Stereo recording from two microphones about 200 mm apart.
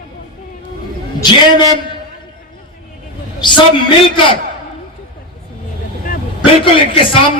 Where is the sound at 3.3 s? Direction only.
25° left (ahead or behind).